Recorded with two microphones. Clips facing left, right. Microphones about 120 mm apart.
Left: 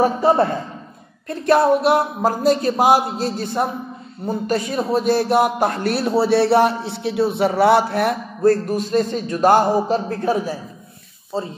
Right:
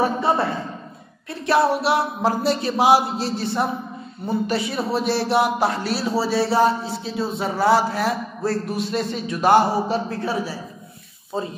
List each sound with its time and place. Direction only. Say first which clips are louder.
0.0 s a man's voice: left 4 dB; 45° left (ahead or behind); by 8.2 s 60° left (ahead or behind)
8.5 s a man's voice: left 8 dB; 45° left (ahead or behind)